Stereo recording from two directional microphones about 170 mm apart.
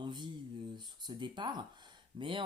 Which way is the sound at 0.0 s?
25° right (ahead or behind).